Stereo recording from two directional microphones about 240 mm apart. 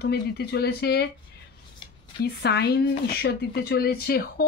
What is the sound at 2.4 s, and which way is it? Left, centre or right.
Speech, left.